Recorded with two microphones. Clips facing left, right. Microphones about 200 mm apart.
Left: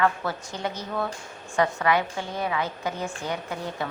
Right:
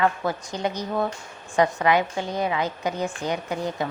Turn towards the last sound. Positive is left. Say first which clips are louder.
# right 4 dB
turn(degrees=-20)  # may be behind; listen again after turning